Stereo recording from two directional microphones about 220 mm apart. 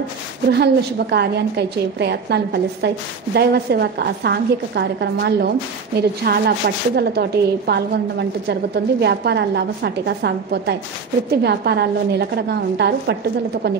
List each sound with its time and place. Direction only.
0.5 s a woman's voice: 50° right (ahead or behind)